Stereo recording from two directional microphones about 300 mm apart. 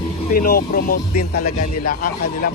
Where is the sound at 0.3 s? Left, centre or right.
Left.